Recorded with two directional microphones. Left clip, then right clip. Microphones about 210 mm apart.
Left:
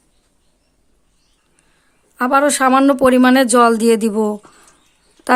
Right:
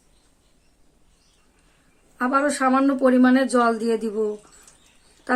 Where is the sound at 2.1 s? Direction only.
50° left (ahead or behind).